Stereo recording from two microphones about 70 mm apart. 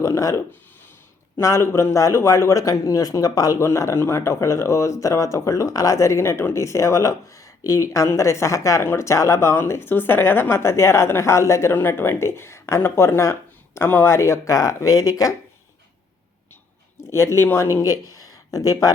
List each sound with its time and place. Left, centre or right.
0.0 s speech: left
1.4 s speech: left
3.6 s speech: left
11.7 s speech: left
17.1 s speech: left